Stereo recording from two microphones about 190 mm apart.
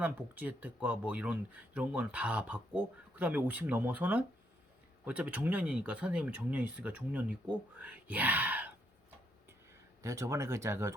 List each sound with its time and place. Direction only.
0.0 s speech: 10° right (ahead or behind)
10.0 s speech: 15° right (ahead or behind)